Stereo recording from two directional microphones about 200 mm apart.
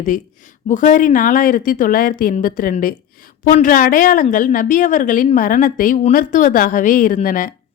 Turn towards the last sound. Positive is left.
turn(degrees=40)  # may be behind; listen again after turning